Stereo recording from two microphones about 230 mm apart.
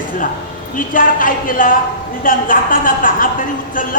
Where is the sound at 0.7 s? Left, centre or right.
Left.